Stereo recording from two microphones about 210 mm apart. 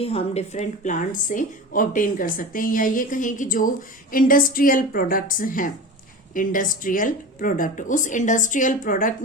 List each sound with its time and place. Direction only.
0.0 s a woman's voice: 30° left (ahead or behind)